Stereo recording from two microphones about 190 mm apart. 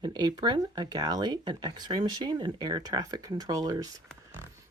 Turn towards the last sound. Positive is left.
turn(degrees=-20)  # may be behind; listen again after turning